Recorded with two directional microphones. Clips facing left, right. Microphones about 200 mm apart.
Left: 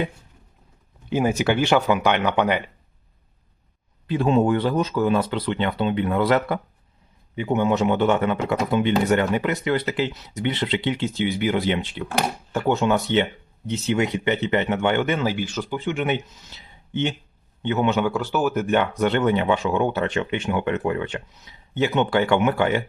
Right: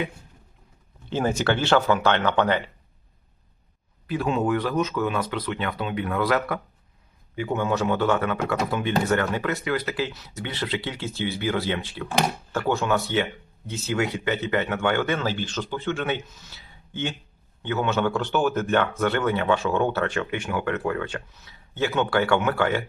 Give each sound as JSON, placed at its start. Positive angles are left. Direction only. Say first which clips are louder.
{"t": 1.1, "sound": "speech", "louder": "left 3 dB", "side_deg": 10}
{"t": 4.0, "sound": "speech", "louder": "left 5 dB", "side_deg": 25}